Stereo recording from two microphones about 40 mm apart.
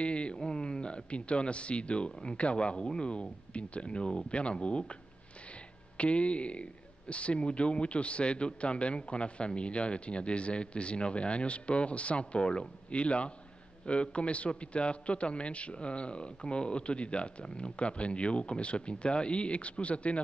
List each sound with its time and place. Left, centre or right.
0.0 s a sound: left
0.4 s a man's voice: left
5.9 s a man's voice: left